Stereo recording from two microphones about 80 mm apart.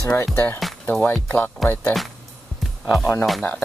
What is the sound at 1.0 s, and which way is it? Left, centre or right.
Speech, centre.